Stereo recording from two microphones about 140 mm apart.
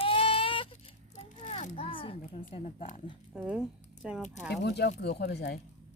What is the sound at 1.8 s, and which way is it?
Speech, 40° left (ahead or behind).